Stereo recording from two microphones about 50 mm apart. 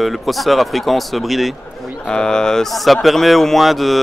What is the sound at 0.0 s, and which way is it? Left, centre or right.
Speech, centre.